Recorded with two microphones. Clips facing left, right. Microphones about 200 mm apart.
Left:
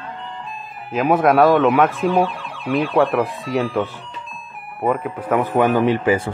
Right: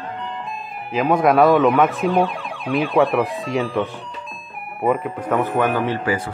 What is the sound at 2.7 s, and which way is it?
Speech, centre (ahead or behind).